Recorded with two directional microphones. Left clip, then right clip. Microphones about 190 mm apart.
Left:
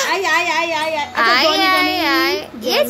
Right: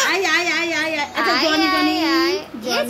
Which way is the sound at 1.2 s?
25° left (ahead or behind).